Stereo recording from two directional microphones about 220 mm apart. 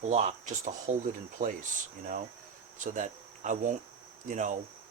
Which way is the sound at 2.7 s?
35° right (ahead or behind).